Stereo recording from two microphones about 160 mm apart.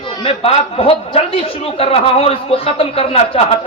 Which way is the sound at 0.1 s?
35° left (ahead or behind).